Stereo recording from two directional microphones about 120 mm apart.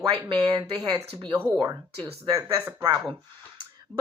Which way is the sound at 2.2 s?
30° right (ahead or behind).